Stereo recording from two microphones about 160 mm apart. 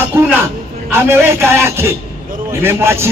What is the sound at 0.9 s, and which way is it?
Speech, 15° right (ahead or behind).